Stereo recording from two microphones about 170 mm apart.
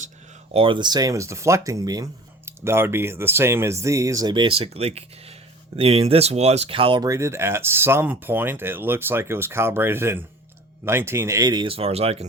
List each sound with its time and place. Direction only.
0.5 s speech: 30° right (ahead or behind)